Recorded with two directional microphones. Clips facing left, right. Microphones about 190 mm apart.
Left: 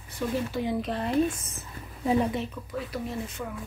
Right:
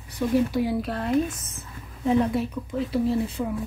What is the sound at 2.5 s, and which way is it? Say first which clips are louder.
Speech: right 8 dB; 25° right (ahead or behind).